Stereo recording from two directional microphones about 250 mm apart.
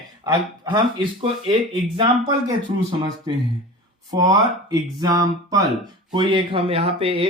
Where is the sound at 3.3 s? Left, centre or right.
Centre.